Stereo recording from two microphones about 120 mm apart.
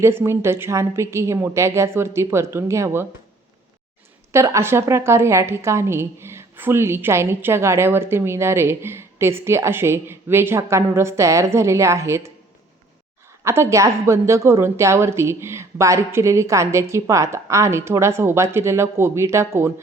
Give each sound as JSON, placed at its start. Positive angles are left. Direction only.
{"t": 0.0, "sound": "a woman's voice", "side_deg": -20}
{"t": 4.3, "sound": "a woman's voice", "side_deg": -25}
{"t": 13.4, "sound": "a woman's voice", "side_deg": -20}